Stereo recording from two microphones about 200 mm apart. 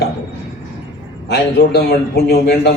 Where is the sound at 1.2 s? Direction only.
55° left (ahead or behind).